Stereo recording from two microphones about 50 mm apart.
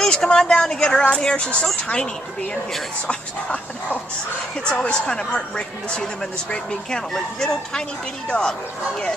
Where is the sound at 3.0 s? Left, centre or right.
Left.